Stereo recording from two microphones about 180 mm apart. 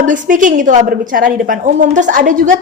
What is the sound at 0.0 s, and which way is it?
A woman's voice, 45° right (ahead or behind).